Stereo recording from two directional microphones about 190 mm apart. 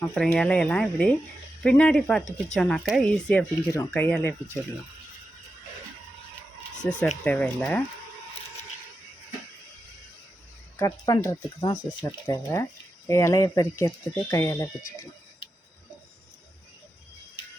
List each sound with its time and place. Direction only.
0.0 s speech: 5° left (ahead or behind)
6.8 s speech: 5° left (ahead or behind)
10.8 s speech: 20° left (ahead or behind)